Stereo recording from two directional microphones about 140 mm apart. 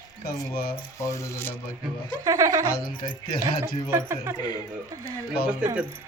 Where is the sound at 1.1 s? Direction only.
15° left (ahead or behind).